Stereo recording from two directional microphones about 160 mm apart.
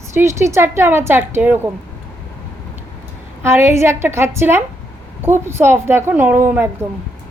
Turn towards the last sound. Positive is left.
turn(degrees=-15)  # may be behind; listen again after turning